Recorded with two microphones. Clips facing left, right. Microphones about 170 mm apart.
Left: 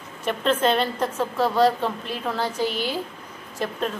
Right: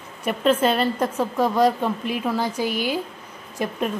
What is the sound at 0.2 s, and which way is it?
A woman's voice, 10° right (ahead or behind).